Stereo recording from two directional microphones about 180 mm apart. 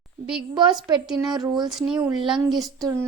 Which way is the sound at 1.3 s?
25° right (ahead or behind).